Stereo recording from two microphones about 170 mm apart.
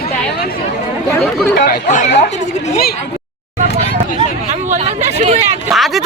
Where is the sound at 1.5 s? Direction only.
65° left (ahead or behind).